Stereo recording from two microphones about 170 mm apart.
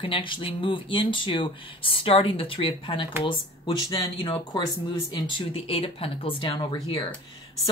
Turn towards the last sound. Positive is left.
turn(degrees=30)  # may be behind; listen again after turning